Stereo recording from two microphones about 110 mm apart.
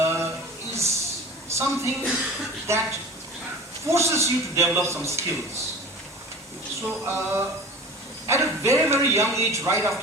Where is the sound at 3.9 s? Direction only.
25° right (ahead or behind).